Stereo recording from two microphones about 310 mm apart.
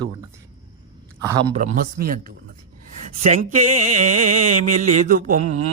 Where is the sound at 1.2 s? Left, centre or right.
Centre.